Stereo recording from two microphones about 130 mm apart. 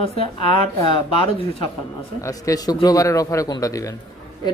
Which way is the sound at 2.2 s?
25° left (ahead or behind).